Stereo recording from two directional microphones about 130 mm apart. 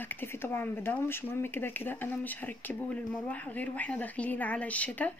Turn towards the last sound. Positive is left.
turn(degrees=10)  # may be behind; listen again after turning